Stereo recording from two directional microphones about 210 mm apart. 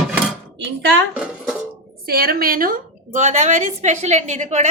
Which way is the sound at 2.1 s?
45° right (ahead or behind).